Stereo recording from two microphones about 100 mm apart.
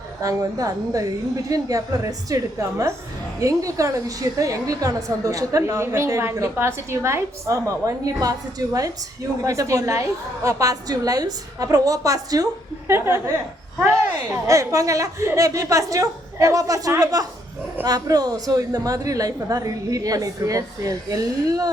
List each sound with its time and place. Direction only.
0.2 s a woman's voice: 35° right (ahead or behind)
12.9 s a woman's voice: 25° right (ahead or behind)